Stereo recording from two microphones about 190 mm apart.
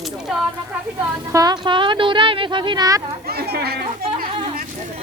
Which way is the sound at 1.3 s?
20° right (ahead or behind).